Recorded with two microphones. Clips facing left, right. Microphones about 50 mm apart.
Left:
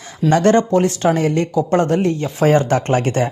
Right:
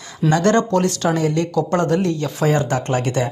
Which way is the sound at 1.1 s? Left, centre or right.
Left.